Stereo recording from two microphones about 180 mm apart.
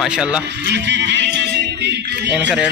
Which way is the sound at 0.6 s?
70° right (ahead or behind).